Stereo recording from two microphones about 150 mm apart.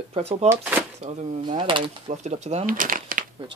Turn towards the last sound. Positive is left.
turn(degrees=-65)  # may be behind; listen again after turning